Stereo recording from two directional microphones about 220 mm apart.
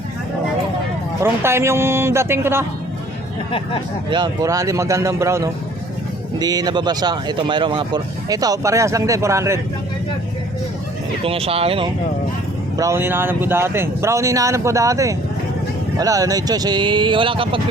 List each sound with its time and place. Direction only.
1.2 s speech: 10° right (ahead or behind)
4.1 s speech: 15° right (ahead or behind)
11.3 s speech: 25° right (ahead or behind)
12.7 s speech: 15° right (ahead or behind)